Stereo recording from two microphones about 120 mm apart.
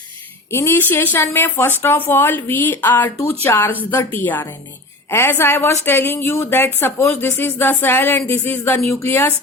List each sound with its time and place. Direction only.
0.5 s a woman's voice: 20° left (ahead or behind)